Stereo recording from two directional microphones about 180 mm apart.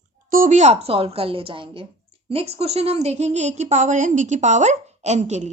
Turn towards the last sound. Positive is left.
turn(degrees=-40)  # may be behind; listen again after turning